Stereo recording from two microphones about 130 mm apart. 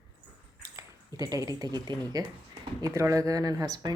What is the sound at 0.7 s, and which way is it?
Speech, 30° right (ahead or behind).